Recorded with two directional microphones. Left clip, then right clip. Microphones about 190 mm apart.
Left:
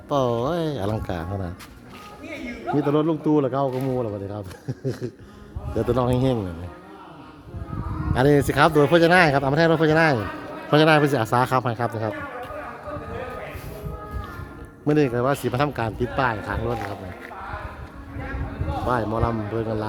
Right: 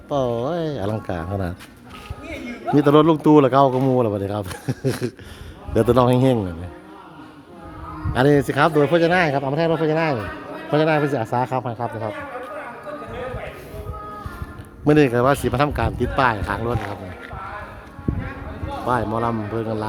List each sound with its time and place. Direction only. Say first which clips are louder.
0.1 s speech: even; 5° left (ahead or behind); by 1.5 s 20° right (ahead or behind)
2.7 s speech: right 7 dB; 35° right (ahead or behind)
5.7 s speech: right 6 dB; 30° right (ahead or behind)
8.1 s a man's voice: right 2 dB; 10° right (ahead or behind); by 12.1 s 20° left (ahead or behind)
14.8 s speech: right 5 dB; 25° right (ahead or behind)
18.9 s a man's voice: right 3 dB; 10° right (ahead or behind)